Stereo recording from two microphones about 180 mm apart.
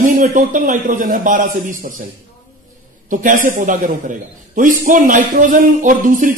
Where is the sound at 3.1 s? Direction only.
45° right (ahead or behind).